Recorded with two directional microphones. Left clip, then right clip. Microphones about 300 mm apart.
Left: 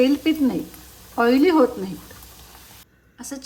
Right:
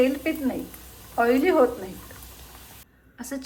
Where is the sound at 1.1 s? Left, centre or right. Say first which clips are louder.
Left 3 dB; left.